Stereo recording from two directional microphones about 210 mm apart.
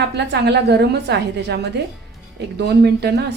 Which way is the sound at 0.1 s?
55° right (ahead or behind).